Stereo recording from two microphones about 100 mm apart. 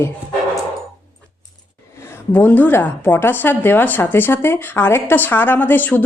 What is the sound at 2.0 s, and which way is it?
A woman's voice, 20° left (ahead or behind).